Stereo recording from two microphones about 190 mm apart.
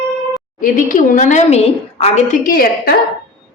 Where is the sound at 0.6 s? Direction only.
45° left (ahead or behind).